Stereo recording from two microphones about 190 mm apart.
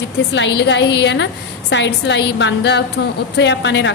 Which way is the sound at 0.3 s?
70° left (ahead or behind).